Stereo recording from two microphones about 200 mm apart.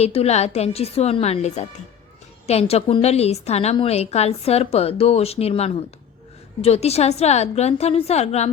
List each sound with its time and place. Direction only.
0.0 s a woman's voice: 30° left (ahead or behind)